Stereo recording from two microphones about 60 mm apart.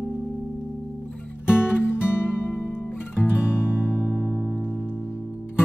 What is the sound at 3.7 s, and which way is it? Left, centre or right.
Music, left.